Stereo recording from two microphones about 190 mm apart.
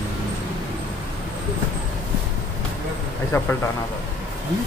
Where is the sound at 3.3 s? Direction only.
15° left (ahead or behind).